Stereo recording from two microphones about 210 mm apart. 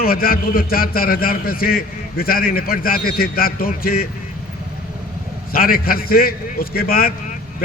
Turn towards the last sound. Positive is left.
turn(degrees=45)  # may be behind; listen again after turning